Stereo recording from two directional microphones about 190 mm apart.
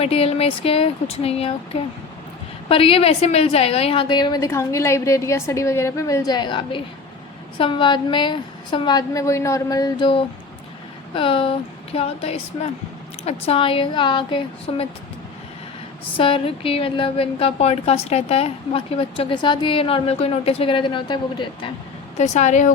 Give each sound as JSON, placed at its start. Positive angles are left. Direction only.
{"t": 0.0, "sound": "a woman's voice", "side_deg": 30}
{"t": 16.1, "sound": "a woman's voice", "side_deg": 30}
{"t": 22.2, "sound": "speech", "side_deg": 40}